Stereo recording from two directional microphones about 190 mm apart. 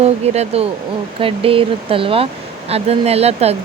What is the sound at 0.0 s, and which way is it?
Speech, 30° right (ahead or behind).